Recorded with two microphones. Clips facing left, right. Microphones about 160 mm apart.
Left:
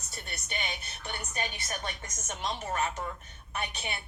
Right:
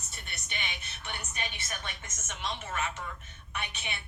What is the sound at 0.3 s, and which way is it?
Speech, 40° left (ahead or behind).